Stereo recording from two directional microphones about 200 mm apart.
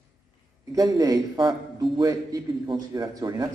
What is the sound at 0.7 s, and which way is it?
A man's voice, 20° right (ahead or behind).